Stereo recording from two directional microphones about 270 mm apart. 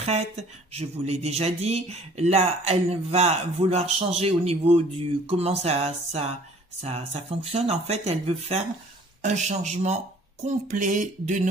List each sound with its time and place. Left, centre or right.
0.0 s speech: right